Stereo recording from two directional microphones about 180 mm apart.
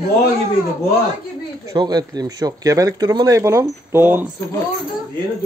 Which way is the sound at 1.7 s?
20° right (ahead or behind).